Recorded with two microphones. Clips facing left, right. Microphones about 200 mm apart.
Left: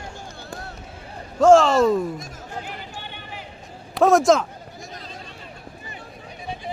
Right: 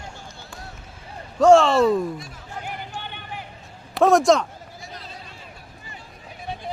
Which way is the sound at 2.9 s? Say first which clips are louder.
Right 2 dB; 50° right (ahead or behind).